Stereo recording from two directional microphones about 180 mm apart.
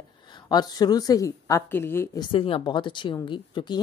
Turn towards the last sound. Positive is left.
turn(degrees=25)  # may be behind; listen again after turning